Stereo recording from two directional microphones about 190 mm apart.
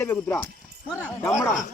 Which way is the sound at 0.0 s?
10° left (ahead or behind).